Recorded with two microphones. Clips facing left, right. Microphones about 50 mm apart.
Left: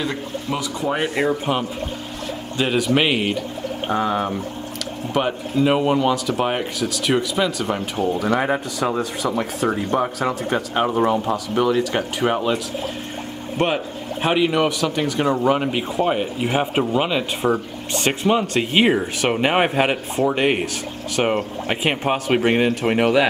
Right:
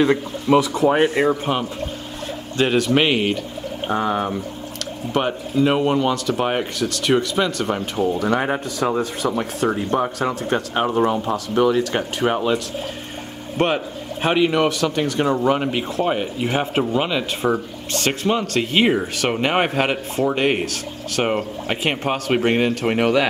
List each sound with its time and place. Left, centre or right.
0.0 s speech: right
2.5 s speech: centre
10.7 s speech: centre
11.0 s speech: centre
13.6 s speech: centre